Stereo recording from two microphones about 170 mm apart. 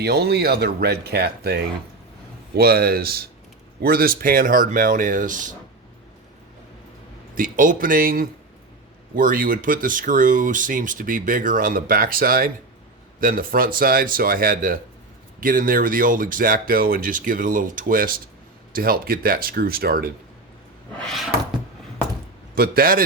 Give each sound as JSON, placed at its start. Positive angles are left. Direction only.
{"t": 0.0, "sound": "speech", "side_deg": -70}
{"t": 7.3, "sound": "speech", "side_deg": -55}
{"t": 21.0, "sound": "cupboard open or close", "side_deg": 0}
{"t": 22.5, "sound": "speech", "side_deg": -60}